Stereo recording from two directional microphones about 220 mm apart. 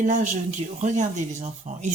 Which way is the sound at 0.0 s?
35° right (ahead or behind).